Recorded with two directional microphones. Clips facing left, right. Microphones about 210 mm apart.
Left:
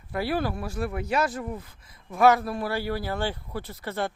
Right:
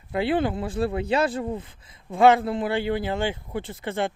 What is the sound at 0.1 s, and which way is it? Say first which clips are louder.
Speech: right 4 dB; 20° right (ahead or behind).